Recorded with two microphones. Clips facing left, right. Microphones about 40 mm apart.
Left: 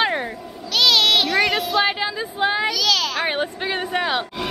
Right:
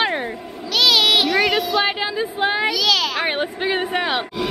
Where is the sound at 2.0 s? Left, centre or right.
Centre.